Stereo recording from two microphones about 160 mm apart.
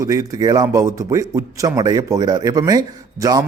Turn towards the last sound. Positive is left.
turn(degrees=-20)  # may be behind; listen again after turning